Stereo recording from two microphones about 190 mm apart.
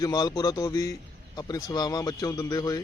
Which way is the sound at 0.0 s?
20° left (ahead or behind).